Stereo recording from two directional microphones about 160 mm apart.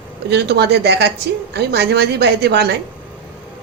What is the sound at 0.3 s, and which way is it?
Speech, 90° right.